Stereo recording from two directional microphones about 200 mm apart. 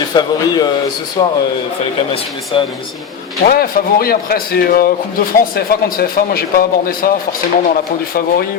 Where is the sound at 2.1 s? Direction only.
25° left (ahead or behind).